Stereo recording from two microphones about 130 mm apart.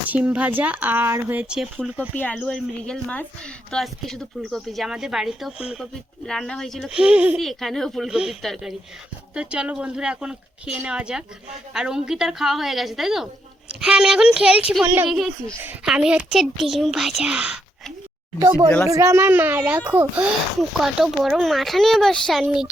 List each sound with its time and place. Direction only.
0.1 s speech: 10° right (ahead or behind)
2.1 s a child's voice: 10° left (ahead or behind); by 7.3 s 10° right (ahead or behind)
7.3 s a child's voice: centre (ahead or behind)
18.3 s speech: 35° right (ahead or behind); by 20.2 s 15° right (ahead or behind)
20.6 s a child's voice: 5° right (ahead or behind)
22.4 s speech: 10° right (ahead or behind)